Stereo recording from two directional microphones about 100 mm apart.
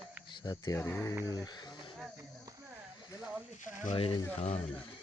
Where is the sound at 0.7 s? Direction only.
25° left (ahead or behind).